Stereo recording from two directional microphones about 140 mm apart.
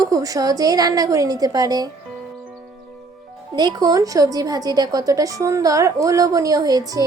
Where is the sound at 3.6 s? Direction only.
30° right (ahead or behind).